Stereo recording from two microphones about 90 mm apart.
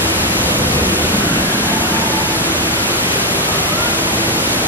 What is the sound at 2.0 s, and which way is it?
Pink noise, 20° right (ahead or behind).